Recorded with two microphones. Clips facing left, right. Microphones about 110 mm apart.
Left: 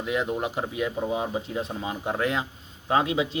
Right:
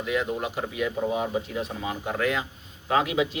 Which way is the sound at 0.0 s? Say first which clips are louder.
Even; 25° left (ahead or behind).